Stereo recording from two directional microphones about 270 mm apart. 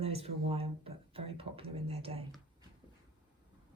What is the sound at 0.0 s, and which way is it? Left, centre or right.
Speech, right.